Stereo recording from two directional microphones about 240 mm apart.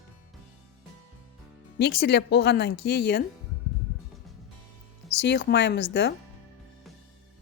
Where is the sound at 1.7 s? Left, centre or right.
Left.